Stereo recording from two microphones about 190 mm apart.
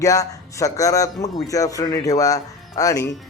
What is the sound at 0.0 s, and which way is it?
Speech, 15° left (ahead or behind).